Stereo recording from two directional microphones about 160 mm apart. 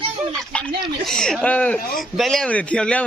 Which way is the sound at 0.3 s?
5° left (ahead or behind).